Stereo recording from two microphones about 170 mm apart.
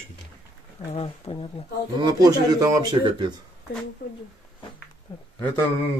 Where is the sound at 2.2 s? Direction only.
20° right (ahead or behind).